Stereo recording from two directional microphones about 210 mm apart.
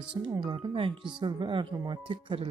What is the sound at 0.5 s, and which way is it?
Speech, 25° right (ahead or behind).